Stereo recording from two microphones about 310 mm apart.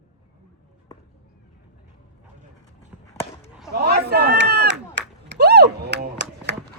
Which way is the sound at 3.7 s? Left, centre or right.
Right.